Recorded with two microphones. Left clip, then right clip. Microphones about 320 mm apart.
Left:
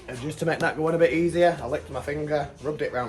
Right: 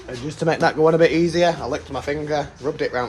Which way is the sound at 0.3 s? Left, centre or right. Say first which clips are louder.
Right 6 dB; centre.